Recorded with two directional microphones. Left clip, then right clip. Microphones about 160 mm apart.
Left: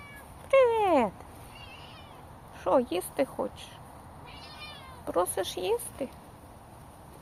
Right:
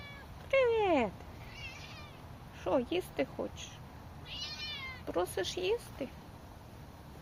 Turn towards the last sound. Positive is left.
turn(degrees=15)  # may be behind; listen again after turning